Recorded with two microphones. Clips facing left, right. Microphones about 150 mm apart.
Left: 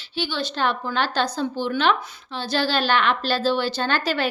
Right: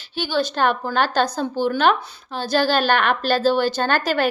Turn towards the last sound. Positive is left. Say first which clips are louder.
# right 3 dB
turn(degrees=-50)  # may be behind; listen again after turning